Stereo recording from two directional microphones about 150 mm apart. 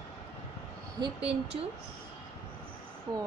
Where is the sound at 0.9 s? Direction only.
30° right (ahead or behind).